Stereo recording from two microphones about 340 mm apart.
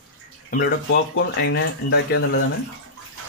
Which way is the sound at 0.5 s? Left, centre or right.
Left.